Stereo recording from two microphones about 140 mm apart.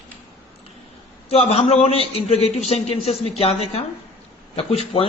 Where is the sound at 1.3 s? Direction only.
45° left (ahead or behind).